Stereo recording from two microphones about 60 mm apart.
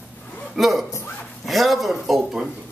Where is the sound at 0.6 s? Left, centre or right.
Centre.